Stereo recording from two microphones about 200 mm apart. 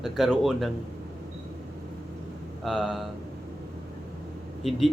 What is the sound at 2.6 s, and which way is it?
Speech, centre (ahead or behind).